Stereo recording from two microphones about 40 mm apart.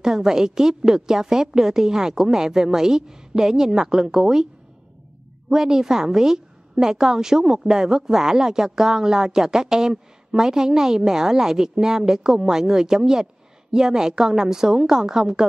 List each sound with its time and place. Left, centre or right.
0.0 s a woman's voice: centre
5.5 s a woman's voice: centre